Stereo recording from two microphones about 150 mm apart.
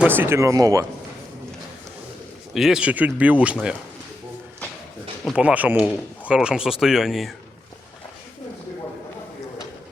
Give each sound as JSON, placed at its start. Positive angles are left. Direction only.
{"t": 0.0, "sound": "speech", "side_deg": -15}
{"t": 2.5, "sound": "speech", "side_deg": -5}
{"t": 5.2, "sound": "speech", "side_deg": -5}